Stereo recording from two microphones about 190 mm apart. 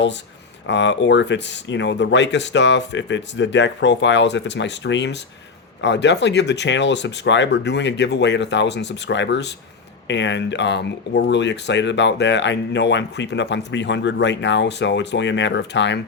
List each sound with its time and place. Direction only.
0.7 s speech: 70° left (ahead or behind)